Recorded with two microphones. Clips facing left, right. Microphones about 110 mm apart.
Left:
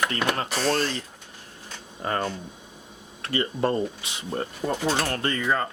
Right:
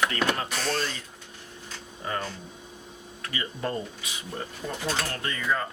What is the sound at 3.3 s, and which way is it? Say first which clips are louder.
Speech: left 7 dB; 30° left (ahead or behind).